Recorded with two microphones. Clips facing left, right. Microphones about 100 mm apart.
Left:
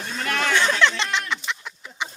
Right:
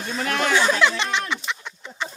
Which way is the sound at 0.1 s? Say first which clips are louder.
Right 2 dB; 10° right (ahead or behind).